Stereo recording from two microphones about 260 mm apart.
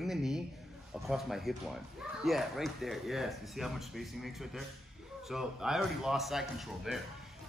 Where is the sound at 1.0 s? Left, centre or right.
Centre.